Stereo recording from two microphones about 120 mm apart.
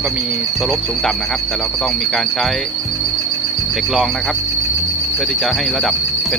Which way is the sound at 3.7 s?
5° right (ahead or behind).